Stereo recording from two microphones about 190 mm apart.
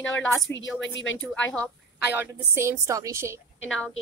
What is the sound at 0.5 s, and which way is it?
Speech, 75° left (ahead or behind).